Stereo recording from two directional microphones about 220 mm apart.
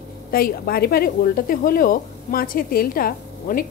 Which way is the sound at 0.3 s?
45° left (ahead or behind).